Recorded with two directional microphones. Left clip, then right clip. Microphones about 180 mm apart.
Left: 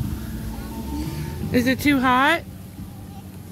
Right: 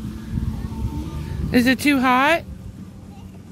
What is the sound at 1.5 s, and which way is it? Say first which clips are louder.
Speech: right 2 dB; 35° right (ahead or behind).